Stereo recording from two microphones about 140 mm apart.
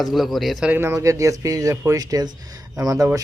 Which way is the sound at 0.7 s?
20° right (ahead or behind).